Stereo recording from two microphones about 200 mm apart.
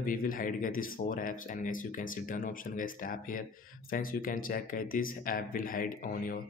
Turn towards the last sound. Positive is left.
turn(degrees=45)  # may be behind; listen again after turning